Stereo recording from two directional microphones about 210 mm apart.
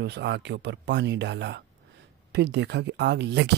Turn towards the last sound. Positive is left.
turn(degrees=-55)  # may be behind; listen again after turning